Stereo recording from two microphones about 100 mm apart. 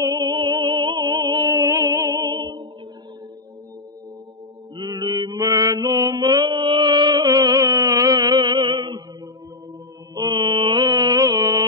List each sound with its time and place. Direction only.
0.0 s music: 40° right (ahead or behind)
2.3 s music: 45° right (ahead or behind)
4.7 s mantra: 40° right (ahead or behind)
10.1 s mantra: 45° right (ahead or behind)